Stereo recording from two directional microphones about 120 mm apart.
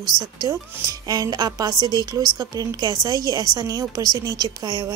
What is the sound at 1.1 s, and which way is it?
Speech, 30° right (ahead or behind).